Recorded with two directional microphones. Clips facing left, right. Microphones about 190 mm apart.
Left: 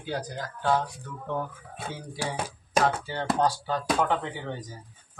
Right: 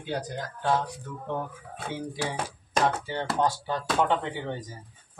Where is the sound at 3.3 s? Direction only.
20° right (ahead or behind).